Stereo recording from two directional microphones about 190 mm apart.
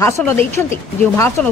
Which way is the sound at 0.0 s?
15° left (ahead or behind).